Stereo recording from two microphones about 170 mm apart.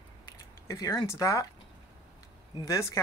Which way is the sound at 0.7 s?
20° left (ahead or behind).